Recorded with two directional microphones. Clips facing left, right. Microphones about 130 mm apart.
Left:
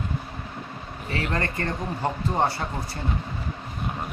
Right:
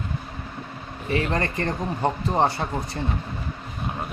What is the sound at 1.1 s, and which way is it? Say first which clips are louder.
Speech: right 4 dB; 25° right (ahead or behind).